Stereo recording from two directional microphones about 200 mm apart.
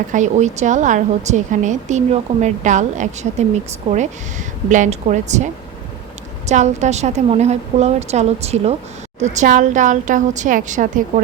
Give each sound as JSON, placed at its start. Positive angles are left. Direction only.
{"t": 0.1, "sound": "a woman's voice", "side_deg": -35}
{"t": 6.5, "sound": "a woman's voice", "side_deg": -35}